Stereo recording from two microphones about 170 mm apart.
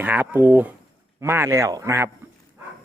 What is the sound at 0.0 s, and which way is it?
A man's voice, 10° right (ahead or behind).